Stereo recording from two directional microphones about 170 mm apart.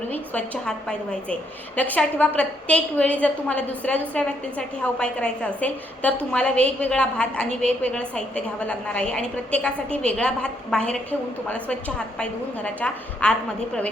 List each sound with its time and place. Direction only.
0.1 s a woman's voice: 10° left (ahead or behind)